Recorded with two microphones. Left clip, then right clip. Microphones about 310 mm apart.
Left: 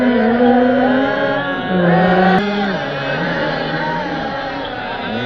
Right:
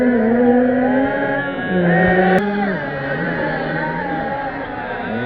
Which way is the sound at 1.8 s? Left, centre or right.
Left.